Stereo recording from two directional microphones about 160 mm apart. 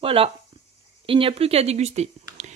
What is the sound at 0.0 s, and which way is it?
Speech, 35° right (ahead or behind).